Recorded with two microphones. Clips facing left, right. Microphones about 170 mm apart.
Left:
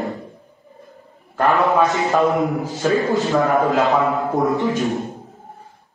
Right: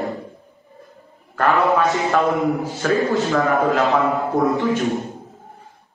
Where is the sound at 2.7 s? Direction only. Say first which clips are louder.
Left 1 dB; 20° left (ahead or behind).